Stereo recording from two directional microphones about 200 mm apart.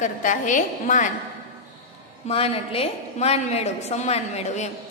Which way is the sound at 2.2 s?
30° left (ahead or behind).